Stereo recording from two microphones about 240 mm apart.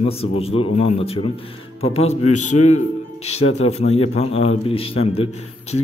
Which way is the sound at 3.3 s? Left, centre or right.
Left.